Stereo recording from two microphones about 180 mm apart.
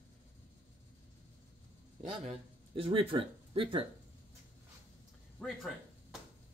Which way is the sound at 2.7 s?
30° right (ahead or behind).